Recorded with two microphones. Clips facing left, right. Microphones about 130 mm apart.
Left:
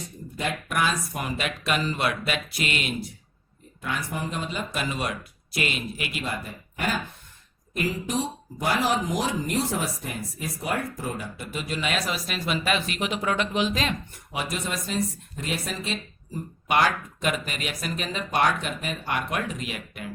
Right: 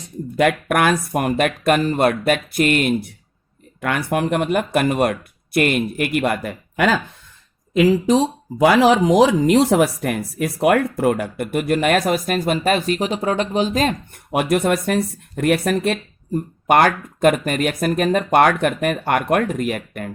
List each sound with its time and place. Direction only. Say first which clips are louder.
0.3 s speech: right 11 dB; 70° right (ahead or behind); by 3.1 s 50° right (ahead or behind)
3.8 s speech: right 10 dB; 70° right (ahead or behind); by 13.9 s 40° right (ahead or behind)
14.3 s speech: right 13 dB; 60° right (ahead or behind)